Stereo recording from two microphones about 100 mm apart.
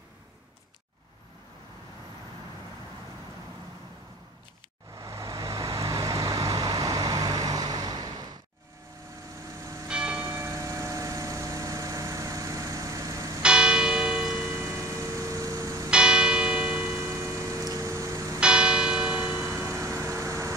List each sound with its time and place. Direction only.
4.9 s vehicle: 30° right (ahead or behind)
9.8 s church bell: 10° right (ahead or behind)
10.2 s vehicle: 30° right (ahead or behind)
13.4 s church bell: 10° right (ahead or behind)
14.4 s music: 25° right (ahead or behind)
15.9 s church bell: 10° right (ahead or behind)
16.8 s church bell: 25° right (ahead or behind)
18.4 s church bell: 10° right (ahead or behind)
19.3 s music: 25° right (ahead or behind)